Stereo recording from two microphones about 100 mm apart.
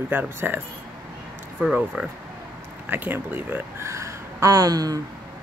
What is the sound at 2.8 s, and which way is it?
Speech, 20° right (ahead or behind).